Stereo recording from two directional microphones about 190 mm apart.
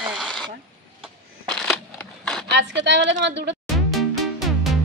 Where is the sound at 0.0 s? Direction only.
Centre (ahead or behind).